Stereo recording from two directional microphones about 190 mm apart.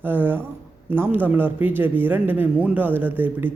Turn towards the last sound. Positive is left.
turn(degrees=-10)  # may be behind; listen again after turning